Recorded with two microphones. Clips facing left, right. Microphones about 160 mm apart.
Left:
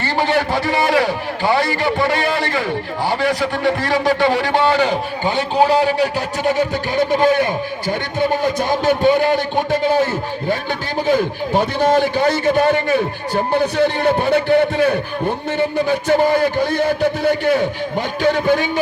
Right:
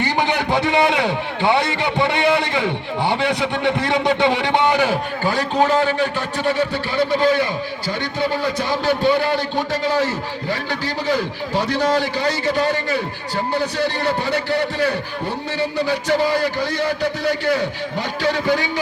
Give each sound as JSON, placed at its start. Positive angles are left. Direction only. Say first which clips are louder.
{"t": 0.0, "sound": "a man's voice", "louder": "left 2 dB", "side_deg": -20}
{"t": 5.2, "sound": "a man's voice", "louder": "left 3 dB", "side_deg": 25}